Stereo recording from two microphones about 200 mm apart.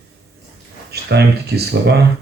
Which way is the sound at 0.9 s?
55° right (ahead or behind).